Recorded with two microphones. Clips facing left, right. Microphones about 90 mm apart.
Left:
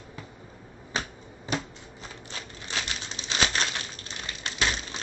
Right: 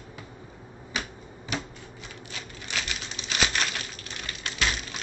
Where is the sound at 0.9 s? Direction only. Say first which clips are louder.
Left 1 dB; 35° left (ahead or behind).